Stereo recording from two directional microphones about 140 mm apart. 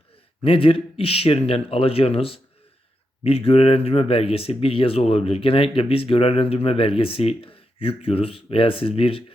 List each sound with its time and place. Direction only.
0.4 s speech: 40° left (ahead or behind)